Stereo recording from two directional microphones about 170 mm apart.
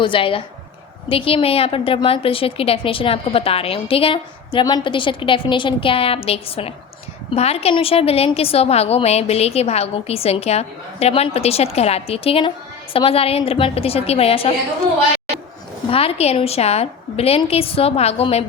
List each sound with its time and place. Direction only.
0.0 s a woman's voice: 30° left (ahead or behind)
15.9 s a woman's voice: 35° left (ahead or behind)